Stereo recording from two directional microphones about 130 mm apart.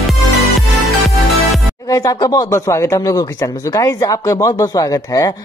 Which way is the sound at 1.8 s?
25° left (ahead or behind).